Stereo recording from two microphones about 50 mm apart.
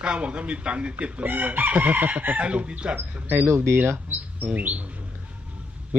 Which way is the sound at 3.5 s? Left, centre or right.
Right.